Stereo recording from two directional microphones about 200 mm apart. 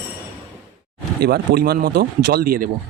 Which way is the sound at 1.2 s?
50° right (ahead or behind).